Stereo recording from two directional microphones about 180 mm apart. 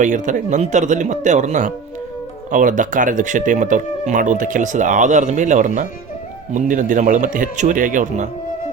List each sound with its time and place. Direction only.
0.0 s a man's voice: 45° right (ahead or behind)